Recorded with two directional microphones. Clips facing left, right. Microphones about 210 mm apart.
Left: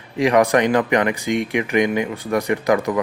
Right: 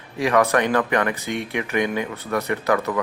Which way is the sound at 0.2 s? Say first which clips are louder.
Left 3 dB; 15° left (ahead or behind).